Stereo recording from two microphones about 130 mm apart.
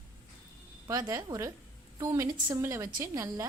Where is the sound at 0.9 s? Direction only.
25° right (ahead or behind).